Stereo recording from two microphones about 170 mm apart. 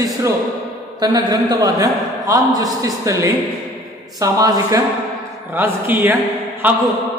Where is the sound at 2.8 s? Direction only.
20° right (ahead or behind).